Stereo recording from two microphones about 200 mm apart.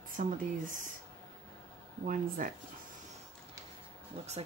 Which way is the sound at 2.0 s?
45° right (ahead or behind).